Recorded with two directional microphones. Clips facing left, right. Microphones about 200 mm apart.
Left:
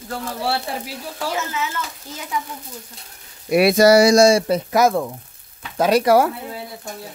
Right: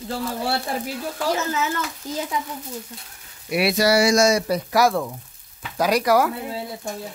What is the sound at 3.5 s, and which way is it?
Speech, 50° left (ahead or behind).